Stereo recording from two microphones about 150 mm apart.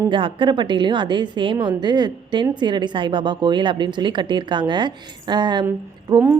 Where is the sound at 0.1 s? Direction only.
35° right (ahead or behind).